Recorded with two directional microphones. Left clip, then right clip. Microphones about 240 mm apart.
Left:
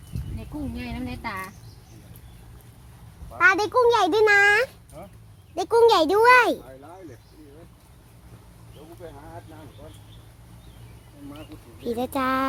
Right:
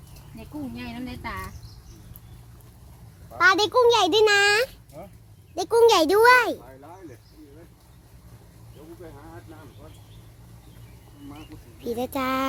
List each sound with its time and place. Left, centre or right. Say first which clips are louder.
0.9 s a child's voice: left 2 dB; centre
3.3 s a child's voice: even; centre
4.9 s speech: right 1 dB; right
5.5 s a child's voice: even; centre
6.3 s speech: left 2 dB; centre
11.8 s a child's voice: left 2 dB; centre